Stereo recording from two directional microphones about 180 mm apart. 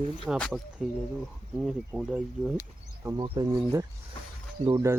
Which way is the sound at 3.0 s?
20° right (ahead or behind).